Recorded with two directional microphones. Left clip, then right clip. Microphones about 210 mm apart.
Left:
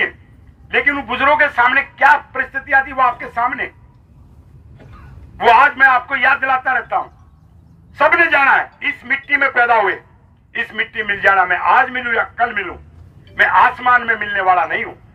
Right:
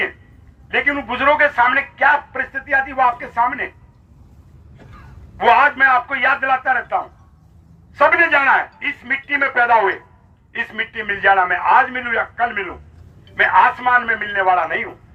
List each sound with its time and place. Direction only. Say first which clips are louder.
0.7 s a man's voice: left 2 dB; 40° left (ahead or behind)
5.4 s a man's voice: left 2 dB; 40° left (ahead or behind)